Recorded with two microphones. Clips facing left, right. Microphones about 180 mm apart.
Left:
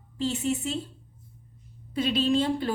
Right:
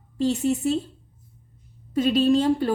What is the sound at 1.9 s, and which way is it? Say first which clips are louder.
Speech: right 5 dB; 45° right (ahead or behind).